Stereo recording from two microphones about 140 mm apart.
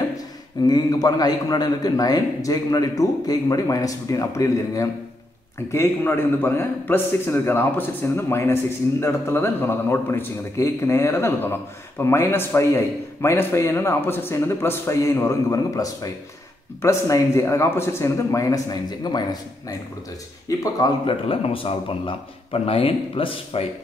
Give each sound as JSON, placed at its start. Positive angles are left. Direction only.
{"t": 0.7, "sound": "a man's voice", "side_deg": 30}
{"t": 20.4, "sound": "a man's voice", "side_deg": 25}
{"t": 21.0, "sound": "speech", "side_deg": 40}